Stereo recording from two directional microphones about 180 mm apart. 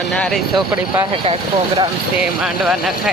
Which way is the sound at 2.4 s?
Centre (ahead or behind).